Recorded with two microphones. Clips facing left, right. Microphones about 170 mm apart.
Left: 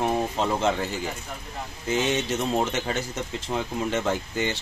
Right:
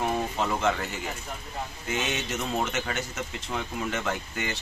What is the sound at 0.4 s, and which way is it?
Speech, 30° left (ahead or behind).